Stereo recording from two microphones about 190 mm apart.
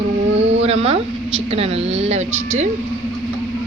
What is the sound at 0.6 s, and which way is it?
Speech, 30° right (ahead or behind).